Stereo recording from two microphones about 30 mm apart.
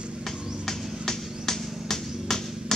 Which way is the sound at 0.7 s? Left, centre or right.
Centre.